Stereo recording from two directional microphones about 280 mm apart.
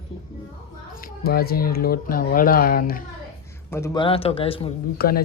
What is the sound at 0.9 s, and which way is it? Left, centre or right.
Speech, left.